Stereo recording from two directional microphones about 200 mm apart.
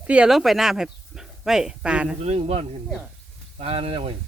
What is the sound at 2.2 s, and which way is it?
Speech, 30° right (ahead or behind).